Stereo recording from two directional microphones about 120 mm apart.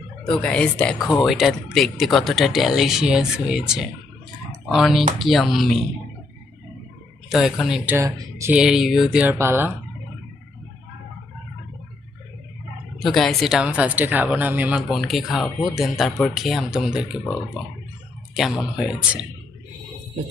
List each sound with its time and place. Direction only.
0.3 s speech: 5° left (ahead or behind)
7.3 s speech: 5° right (ahead or behind)
8.0 s speech: 25° right (ahead or behind)
8.5 s speech: 5° right (ahead or behind)
9.4 s speech: 20° right (ahead or behind)
13.0 s speech: centre (ahead or behind)
14.9 s speech: centre (ahead or behind)
18.3 s speech: 5° right (ahead or behind)